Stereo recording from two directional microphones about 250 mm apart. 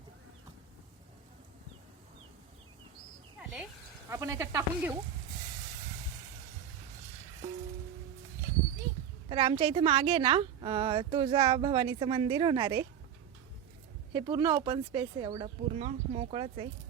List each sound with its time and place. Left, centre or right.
4.1 s speech: centre
9.3 s a woman's voice: right
14.1 s speech: centre